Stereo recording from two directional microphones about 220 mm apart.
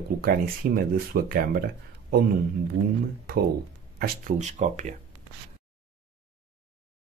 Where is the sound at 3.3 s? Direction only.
45° right (ahead or behind).